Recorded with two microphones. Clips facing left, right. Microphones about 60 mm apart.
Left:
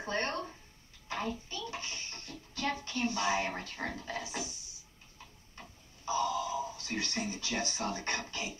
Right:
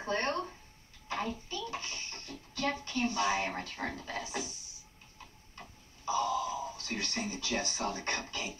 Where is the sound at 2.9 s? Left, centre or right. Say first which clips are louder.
Right 1 dB; right.